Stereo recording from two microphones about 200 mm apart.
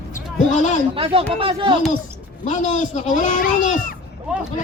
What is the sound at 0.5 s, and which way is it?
Speech, 40° left (ahead or behind).